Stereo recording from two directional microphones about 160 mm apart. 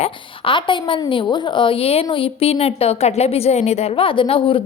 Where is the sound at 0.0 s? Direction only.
30° left (ahead or behind).